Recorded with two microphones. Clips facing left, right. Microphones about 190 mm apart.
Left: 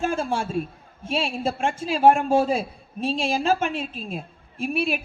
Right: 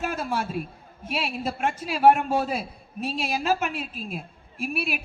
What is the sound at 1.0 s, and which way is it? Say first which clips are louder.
A woman's voice: left 4 dB; 25° left (ahead or behind).